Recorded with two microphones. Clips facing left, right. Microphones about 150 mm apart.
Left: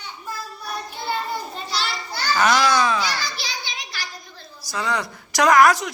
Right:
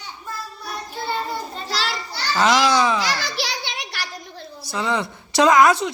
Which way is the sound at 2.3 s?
20° right (ahead or behind).